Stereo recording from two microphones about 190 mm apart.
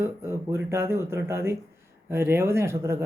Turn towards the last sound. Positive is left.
turn(degrees=-15)  # may be behind; listen again after turning